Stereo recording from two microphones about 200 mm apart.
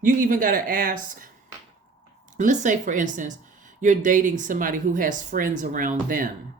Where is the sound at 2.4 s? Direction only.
40° right (ahead or behind).